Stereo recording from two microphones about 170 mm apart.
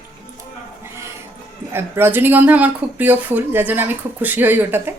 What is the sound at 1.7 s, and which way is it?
Speech, 15° right (ahead or behind).